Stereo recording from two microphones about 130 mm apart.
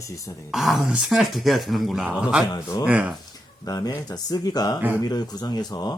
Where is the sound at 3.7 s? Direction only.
30° left (ahead or behind).